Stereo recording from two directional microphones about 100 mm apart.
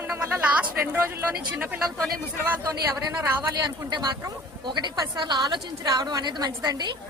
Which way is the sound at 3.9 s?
45° right (ahead or behind).